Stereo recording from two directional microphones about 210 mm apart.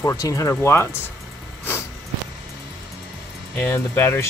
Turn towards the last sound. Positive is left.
turn(degrees=10)  # may be behind; listen again after turning